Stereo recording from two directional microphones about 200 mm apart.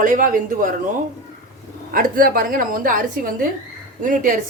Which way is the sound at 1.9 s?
45° right (ahead or behind).